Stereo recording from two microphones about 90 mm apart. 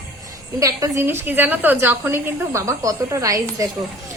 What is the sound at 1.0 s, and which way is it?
A woman's voice, 25° right (ahead or behind).